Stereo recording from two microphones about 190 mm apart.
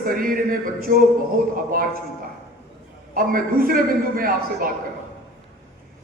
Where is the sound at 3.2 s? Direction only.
50° right (ahead or behind).